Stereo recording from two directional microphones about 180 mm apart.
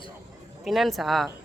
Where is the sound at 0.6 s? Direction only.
Centre (ahead or behind).